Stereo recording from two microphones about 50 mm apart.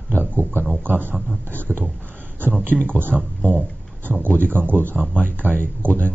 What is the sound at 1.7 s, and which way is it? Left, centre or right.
Speech, centre.